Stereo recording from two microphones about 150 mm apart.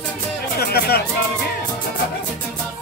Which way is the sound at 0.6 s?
90° left.